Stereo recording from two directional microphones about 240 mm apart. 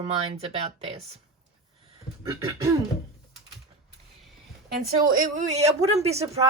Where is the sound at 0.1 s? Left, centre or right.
Right.